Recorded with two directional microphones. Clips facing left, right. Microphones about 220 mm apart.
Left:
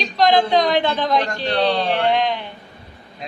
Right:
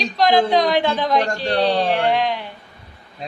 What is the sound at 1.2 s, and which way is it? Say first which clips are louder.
Speech: right 1 dB; 35° right (ahead or behind).